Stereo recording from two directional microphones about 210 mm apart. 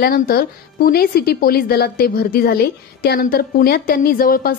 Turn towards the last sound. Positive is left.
turn(degrees=45)  # may be behind; listen again after turning